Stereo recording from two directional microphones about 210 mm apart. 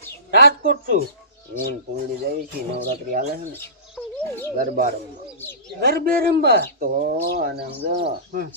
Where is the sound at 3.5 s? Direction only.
10° left (ahead or behind).